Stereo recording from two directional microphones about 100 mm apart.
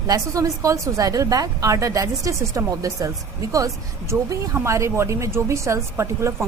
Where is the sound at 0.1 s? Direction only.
35° right (ahead or behind).